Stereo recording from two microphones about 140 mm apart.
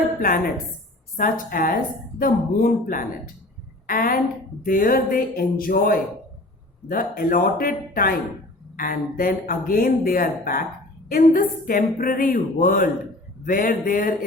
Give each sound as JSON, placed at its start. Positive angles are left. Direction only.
{"t": 0.2, "sound": "a woman's voice", "side_deg": 90}
{"t": 8.7, "sound": "speech", "side_deg": 80}